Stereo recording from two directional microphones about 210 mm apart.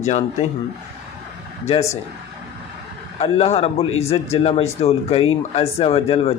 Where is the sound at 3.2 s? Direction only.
30° left (ahead or behind).